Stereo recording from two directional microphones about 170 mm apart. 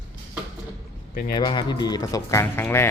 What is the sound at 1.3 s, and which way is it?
Speech, 25° left (ahead or behind).